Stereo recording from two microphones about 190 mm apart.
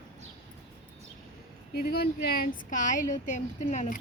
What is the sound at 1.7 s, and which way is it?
Speech, 55° left (ahead or behind).